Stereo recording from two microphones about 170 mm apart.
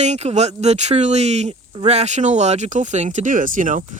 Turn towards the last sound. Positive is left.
turn(degrees=-50)  # may be behind; listen again after turning